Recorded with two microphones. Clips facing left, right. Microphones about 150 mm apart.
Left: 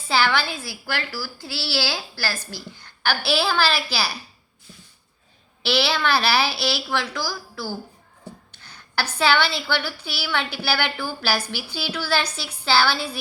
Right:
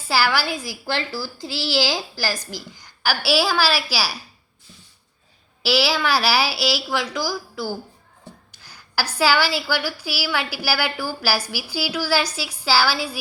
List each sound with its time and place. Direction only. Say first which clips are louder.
0.1 s a woman's voice: right 1 dB; 10° right (ahead or behind)
5.6 s a woman's voice: right 1 dB; 5° right (ahead or behind)